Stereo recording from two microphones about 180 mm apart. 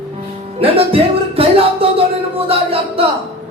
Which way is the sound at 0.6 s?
30° right (ahead or behind).